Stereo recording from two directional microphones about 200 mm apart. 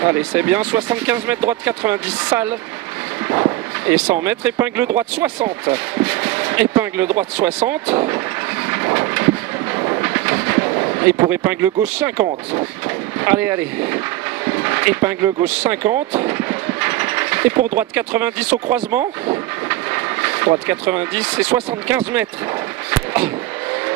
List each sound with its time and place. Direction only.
0.0 s speech: 10° right (ahead or behind)
8.6 s vehicle: 15° right (ahead or behind)
9.8 s train: 15° right (ahead or behind)
11.1 s speech: 10° right (ahead or behind)
16.2 s mechanisms: 15° right (ahead or behind)
17.7 s speech: 10° right (ahead or behind)
19.7 s train: 10° right (ahead or behind)
20.6 s speech: 10° right (ahead or behind)
22.8 s a sound: 10° right (ahead or behind)